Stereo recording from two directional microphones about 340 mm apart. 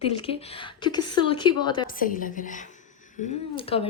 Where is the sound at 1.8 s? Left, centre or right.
Left.